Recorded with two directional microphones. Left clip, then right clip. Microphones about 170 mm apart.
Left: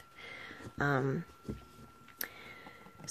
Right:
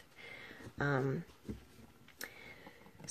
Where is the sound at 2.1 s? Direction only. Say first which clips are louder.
Left 4 dB; 15° left (ahead or behind).